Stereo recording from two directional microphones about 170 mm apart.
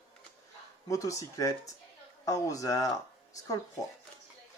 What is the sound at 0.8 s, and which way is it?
Speech, 20° left (ahead or behind).